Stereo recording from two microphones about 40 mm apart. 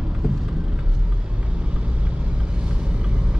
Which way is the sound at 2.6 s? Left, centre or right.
Right.